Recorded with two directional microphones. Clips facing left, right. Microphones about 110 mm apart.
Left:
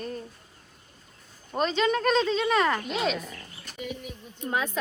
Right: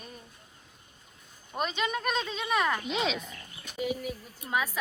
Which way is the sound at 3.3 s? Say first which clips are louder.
Left 2 dB; 15° right (ahead or behind).